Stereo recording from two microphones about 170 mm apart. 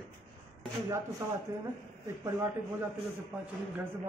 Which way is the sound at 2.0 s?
15° right (ahead or behind).